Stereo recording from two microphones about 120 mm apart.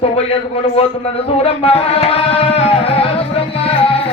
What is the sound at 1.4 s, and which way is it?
Tabla, 50° left (ahead or behind).